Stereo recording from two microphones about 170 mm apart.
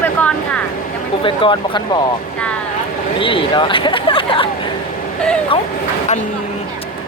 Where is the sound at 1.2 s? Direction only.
30° left (ahead or behind).